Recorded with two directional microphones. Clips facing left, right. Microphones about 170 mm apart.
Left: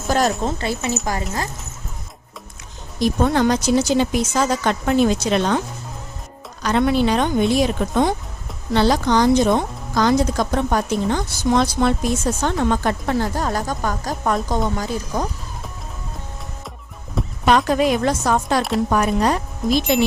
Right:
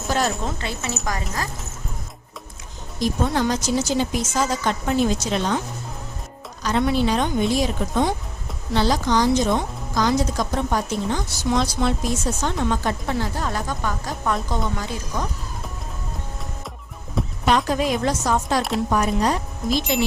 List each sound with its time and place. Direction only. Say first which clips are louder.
0.4 s a woman's voice: left 5 dB; 30° left (ahead or behind)
3.0 s speech: left 4 dB; 60° left (ahead or behind)
6.6 s speech: left 3 dB; 65° left (ahead or behind); by 15.3 s 40° left (ahead or behind)
17.4 s speech: left 4 dB; 65° left (ahead or behind)